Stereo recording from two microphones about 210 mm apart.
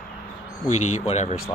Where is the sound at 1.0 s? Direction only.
30° left (ahead or behind).